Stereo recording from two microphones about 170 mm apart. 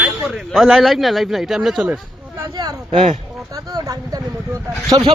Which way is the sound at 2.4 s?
20° right (ahead or behind).